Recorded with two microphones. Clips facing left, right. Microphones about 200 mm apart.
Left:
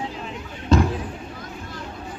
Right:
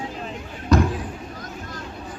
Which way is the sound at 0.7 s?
25° left (ahead or behind).